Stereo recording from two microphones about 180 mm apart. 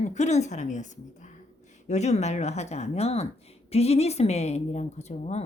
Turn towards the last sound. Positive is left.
turn(degrees=35)  # may be behind; listen again after turning